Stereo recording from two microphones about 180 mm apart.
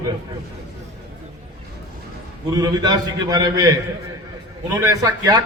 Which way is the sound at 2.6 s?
20° right (ahead or behind).